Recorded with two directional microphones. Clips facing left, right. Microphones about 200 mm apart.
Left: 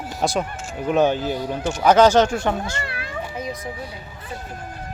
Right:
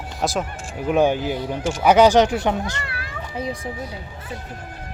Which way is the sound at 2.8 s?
25° left (ahead or behind).